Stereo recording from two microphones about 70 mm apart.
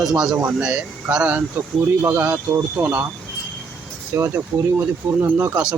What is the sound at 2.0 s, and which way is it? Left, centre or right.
Speech, right.